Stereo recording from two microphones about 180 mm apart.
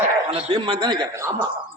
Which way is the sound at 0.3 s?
30° right (ahead or behind).